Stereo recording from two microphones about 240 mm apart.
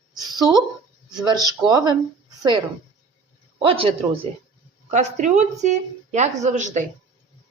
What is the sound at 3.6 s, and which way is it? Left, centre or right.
Speech, right.